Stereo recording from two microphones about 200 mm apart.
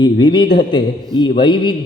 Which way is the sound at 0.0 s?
20° left (ahead or behind).